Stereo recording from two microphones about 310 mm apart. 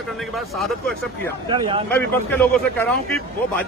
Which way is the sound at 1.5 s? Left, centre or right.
Centre.